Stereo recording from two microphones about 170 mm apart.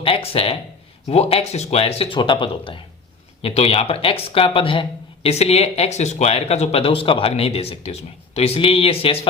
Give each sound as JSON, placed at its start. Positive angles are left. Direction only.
{"t": 0.0, "sound": "speech", "side_deg": 35}